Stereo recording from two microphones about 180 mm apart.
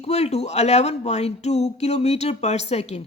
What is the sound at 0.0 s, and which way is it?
Speech, 35° left (ahead or behind).